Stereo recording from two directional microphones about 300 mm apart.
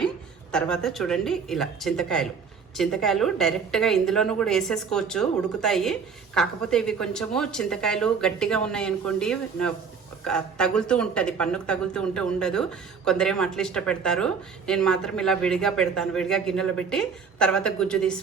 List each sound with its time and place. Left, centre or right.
0.5 s a woman's voice: centre